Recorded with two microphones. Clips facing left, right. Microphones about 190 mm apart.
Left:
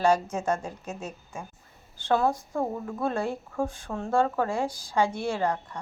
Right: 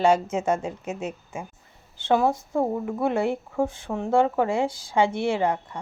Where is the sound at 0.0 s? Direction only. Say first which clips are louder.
Right 3 dB; 25° right (ahead or behind).